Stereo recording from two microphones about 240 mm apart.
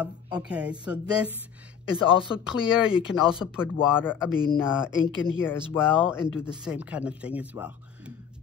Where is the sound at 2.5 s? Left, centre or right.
Centre.